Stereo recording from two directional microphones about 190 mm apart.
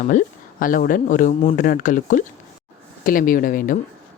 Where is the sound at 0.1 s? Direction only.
45° left (ahead or behind).